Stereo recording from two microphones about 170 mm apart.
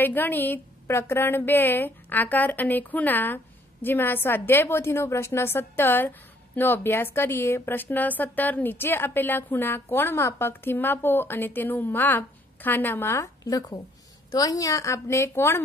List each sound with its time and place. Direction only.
0.0 s a woman's voice: 10° left (ahead or behind)